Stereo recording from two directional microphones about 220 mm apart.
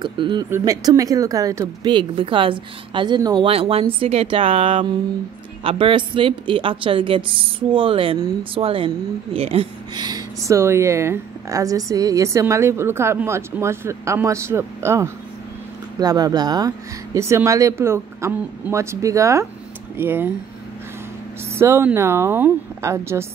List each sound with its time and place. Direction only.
0.0 s a woman's voice: 20° right (ahead or behind)
21.5 s a woman's voice: 10° right (ahead or behind)